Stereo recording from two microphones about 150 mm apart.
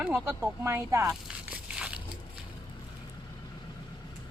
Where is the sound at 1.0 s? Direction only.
5° right (ahead or behind).